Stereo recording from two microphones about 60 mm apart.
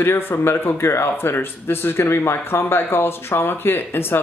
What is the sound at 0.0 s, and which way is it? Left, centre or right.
Speech, left.